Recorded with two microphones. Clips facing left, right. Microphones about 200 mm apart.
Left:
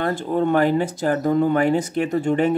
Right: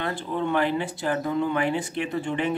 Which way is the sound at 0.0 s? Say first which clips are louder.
Left 7 dB; 45° left (ahead or behind).